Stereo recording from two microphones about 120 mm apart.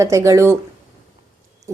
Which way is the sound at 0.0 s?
25° right (ahead or behind).